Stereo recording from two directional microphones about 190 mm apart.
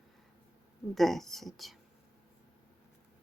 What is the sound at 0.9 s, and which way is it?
Speech, centre (ahead or behind).